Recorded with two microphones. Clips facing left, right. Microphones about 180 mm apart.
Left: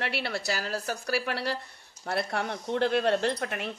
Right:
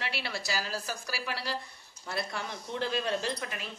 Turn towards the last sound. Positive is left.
turn(degrees=60)  # may be behind; listen again after turning